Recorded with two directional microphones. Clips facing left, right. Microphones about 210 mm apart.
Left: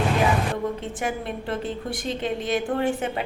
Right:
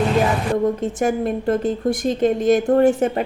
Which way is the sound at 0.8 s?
45° right (ahead or behind).